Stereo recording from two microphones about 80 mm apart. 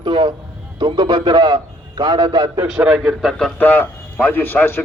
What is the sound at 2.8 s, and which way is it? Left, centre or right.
Speech, centre.